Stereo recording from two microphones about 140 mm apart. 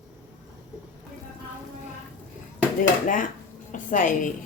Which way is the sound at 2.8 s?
70° left (ahead or behind).